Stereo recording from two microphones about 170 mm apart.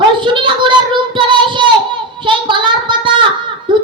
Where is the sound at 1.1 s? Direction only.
30° right (ahead or behind).